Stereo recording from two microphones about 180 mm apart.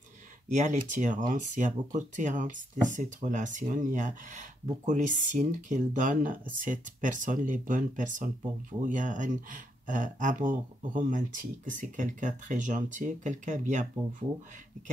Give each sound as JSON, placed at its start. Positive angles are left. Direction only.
{"t": 0.6, "sound": "speech", "side_deg": -45}